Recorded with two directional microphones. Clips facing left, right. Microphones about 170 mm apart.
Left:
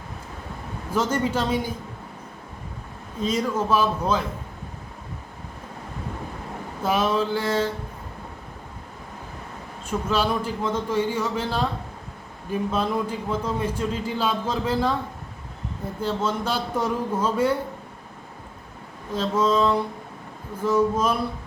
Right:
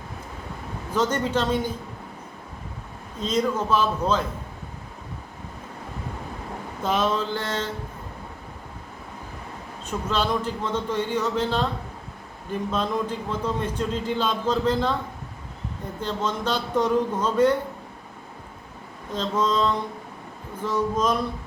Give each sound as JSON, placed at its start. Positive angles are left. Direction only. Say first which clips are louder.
{"t": 0.9, "sound": "a man's voice", "louder": "even", "side_deg": 10}
{"t": 3.2, "sound": "a man's voice", "louder": "even", "side_deg": 10}
{"t": 6.8, "sound": "a man's voice", "louder": "left 2 dB", "side_deg": 10}
{"t": 9.8, "sound": "a man's voice", "louder": "left 2 dB", "side_deg": 10}
{"t": 16.0, "sound": "a man's voice", "louder": "left 2 dB", "side_deg": 10}
{"t": 19.1, "sound": "a man's voice", "louder": "left 2 dB", "side_deg": 10}